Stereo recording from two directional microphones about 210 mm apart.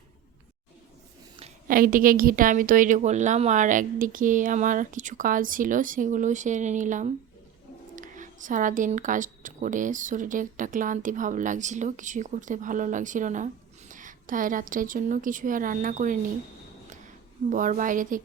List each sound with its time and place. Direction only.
1.6 s speech: 40° right (ahead or behind)
17.5 s speech: 40° right (ahead or behind)